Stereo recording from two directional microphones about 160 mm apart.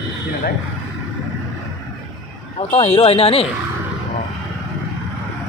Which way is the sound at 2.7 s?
40° left (ahead or behind).